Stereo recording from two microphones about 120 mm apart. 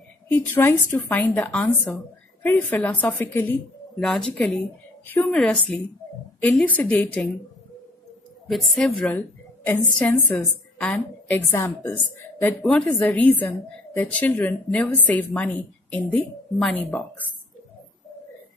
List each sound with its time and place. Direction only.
0.6 s a woman's voice: 15° left (ahead or behind)
8.5 s a woman's voice: centre (ahead or behind)
11.2 s a woman's voice: 15° left (ahead or behind)
12.6 s a woman's voice: 5° left (ahead or behind)